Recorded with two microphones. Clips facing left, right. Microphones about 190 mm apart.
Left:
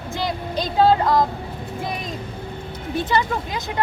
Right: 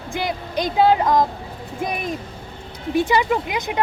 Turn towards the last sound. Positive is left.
turn(degrees=-15)  # may be behind; listen again after turning